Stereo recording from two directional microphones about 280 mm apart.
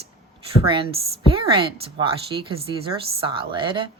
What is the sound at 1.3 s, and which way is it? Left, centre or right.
A woman's voice, centre.